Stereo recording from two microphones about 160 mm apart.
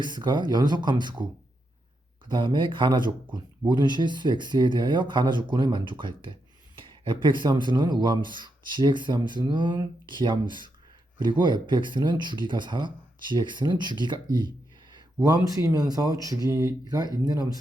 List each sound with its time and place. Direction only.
0.0 s speech: 30° right (ahead or behind)
2.3 s speech: 30° right (ahead or behind)